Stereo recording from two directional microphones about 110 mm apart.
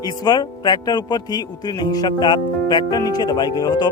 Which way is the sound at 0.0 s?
40° left (ahead or behind).